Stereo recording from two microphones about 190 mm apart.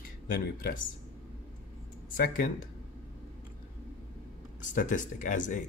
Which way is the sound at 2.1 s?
45° left (ahead or behind).